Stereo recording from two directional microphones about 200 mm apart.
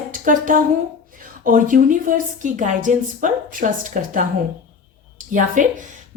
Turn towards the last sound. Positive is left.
turn(degrees=-40)  # may be behind; listen again after turning